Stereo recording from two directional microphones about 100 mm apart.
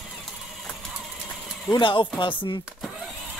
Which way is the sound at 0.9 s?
5° right (ahead or behind).